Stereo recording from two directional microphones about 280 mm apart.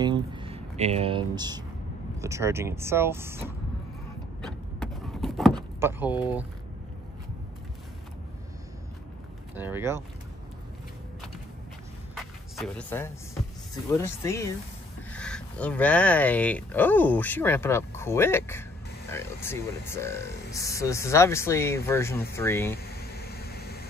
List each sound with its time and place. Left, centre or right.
0.0 s a sound: centre
2.1 s speech: centre
4.4 s vehicle: centre
5.5 s door: centre
9.6 s speech: centre
12.2 s speech: centre
22.8 s a sound: left